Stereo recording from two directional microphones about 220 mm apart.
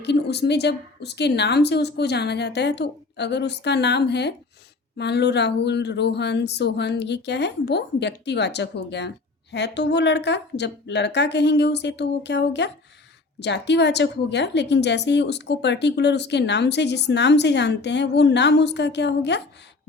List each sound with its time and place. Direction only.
0.0 s speech: 50° left (ahead or behind)